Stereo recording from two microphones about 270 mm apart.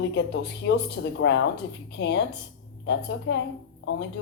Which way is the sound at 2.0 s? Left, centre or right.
Left.